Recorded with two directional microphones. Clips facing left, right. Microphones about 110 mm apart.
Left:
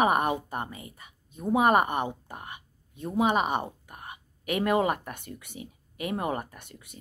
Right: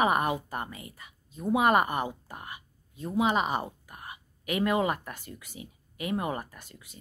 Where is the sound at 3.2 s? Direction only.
50° left (ahead or behind).